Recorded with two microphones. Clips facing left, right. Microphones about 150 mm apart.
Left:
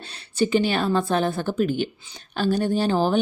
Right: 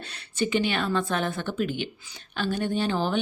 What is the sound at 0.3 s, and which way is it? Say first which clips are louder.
Speech: left 5 dB; 35° left (ahead or behind).